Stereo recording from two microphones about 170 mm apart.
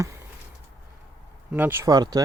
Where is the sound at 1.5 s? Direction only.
15° right (ahead or behind).